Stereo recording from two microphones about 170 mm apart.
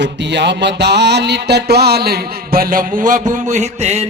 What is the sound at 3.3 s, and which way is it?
Music, 45° right (ahead or behind).